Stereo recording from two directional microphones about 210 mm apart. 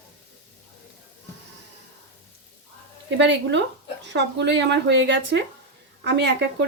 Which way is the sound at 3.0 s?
60° right (ahead or behind).